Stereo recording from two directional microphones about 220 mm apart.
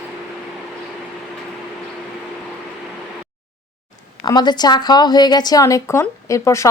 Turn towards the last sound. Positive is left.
turn(degrees=15)  # may be behind; listen again after turning